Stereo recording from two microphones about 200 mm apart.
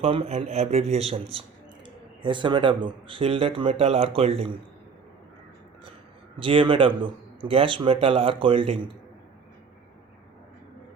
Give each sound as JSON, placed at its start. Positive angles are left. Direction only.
{"t": 0.0, "sound": "speech", "side_deg": -30}
{"t": 6.4, "sound": "speech", "side_deg": -25}